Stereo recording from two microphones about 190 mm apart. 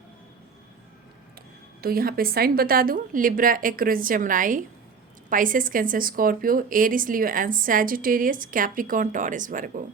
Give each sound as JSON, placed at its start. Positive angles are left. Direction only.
{"t": 1.8, "sound": "a woman's voice", "side_deg": -50}